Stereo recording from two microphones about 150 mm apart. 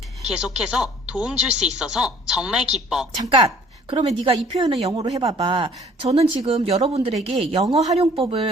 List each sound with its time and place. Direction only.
0.3 s a woman's voice: 5° right (ahead or behind)
3.2 s speech: 35° right (ahead or behind)
5.2 s a woman's voice: 30° right (ahead or behind)